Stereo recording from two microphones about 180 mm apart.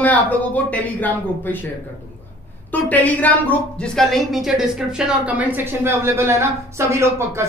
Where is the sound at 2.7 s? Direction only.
10° left (ahead or behind).